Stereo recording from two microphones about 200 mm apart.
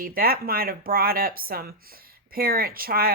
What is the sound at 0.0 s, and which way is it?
Speech, 45° right (ahead or behind).